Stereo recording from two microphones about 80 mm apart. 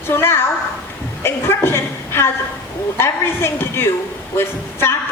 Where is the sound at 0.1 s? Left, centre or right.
Left.